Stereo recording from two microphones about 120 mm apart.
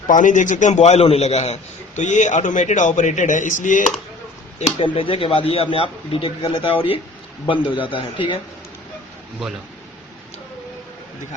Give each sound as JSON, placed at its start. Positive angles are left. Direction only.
{"t": 0.1, "sound": "a man's voice", "side_deg": 90}
{"t": 2.0, "sound": "a man's voice", "side_deg": 80}
{"t": 4.8, "sound": "a man's voice", "side_deg": 50}